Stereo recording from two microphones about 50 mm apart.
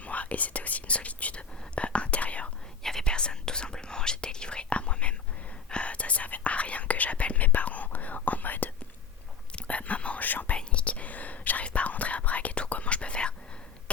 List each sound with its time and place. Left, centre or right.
0.0 s whispering: left
2.8 s whispering: centre; by 10.6 s left
10.6 s whispering: left